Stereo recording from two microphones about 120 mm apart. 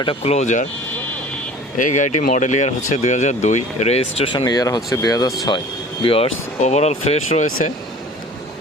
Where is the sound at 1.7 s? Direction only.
90° left; by 4.3 s 60° left (ahead or behind).